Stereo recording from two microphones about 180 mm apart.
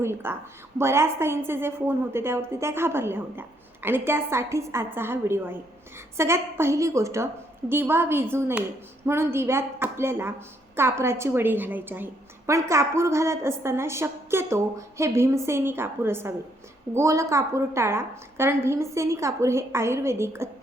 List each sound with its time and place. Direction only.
0.0 s a woman's voice: 15° right (ahead or behind)